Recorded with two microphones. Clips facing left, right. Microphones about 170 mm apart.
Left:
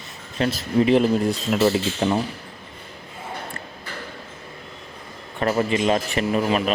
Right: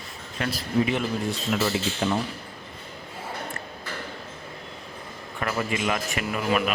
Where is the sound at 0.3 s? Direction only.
25° left (ahead or behind).